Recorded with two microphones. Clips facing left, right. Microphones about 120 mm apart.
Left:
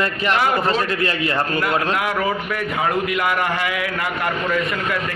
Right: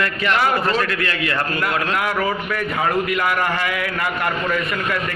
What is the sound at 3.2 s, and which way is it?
Speech, 10° left (ahead or behind).